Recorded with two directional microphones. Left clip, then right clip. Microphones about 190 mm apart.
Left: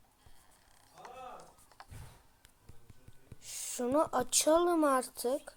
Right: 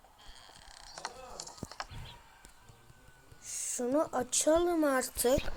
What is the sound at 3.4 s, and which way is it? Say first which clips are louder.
Speech: right 1 dB; 5° right (ahead or behind).